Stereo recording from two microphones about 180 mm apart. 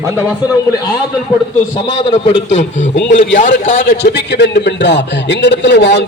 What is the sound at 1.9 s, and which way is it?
Speech, 25° left (ahead or behind).